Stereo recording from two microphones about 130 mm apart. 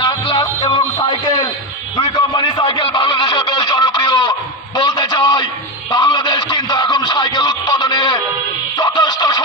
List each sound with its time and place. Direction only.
0.0 s music: 35° left (ahead or behind)
2.0 s a sound: 30° left (ahead or behind)
5.9 s music: 35° left (ahead or behind)